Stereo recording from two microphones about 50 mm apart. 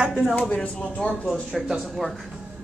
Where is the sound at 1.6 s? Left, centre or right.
Centre.